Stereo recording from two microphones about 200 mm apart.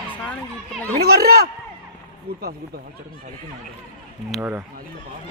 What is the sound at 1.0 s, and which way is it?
A man's voice, 50° right (ahead or behind).